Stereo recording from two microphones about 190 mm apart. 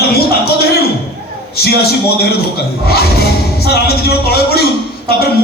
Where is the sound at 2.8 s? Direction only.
55° left (ahead or behind).